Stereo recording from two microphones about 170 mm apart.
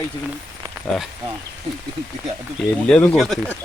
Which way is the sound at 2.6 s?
5° left (ahead or behind).